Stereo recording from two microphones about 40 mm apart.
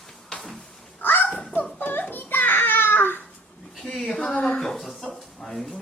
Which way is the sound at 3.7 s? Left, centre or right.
Centre.